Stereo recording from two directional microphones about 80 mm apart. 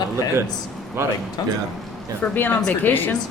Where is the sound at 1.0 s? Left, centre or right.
Right.